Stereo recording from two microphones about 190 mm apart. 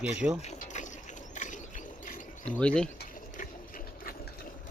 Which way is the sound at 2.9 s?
50° left (ahead or behind).